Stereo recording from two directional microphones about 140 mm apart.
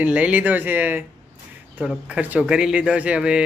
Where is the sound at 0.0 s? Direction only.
10° right (ahead or behind).